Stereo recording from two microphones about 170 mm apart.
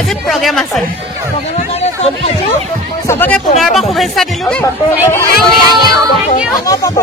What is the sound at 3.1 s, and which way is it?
Speech, 10° left (ahead or behind).